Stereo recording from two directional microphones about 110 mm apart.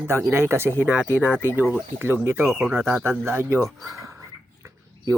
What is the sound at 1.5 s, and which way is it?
Speech, 20° right (ahead or behind).